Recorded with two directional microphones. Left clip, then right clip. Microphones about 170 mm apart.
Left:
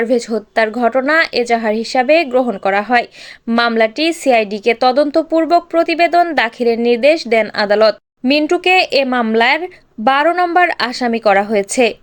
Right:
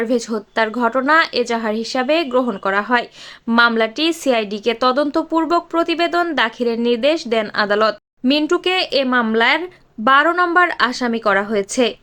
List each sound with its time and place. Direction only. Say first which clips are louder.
0.0 s a woman's voice: left 4 dB; 15° left (ahead or behind)